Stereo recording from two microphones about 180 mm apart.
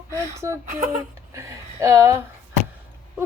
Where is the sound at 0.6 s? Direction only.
45° right (ahead or behind).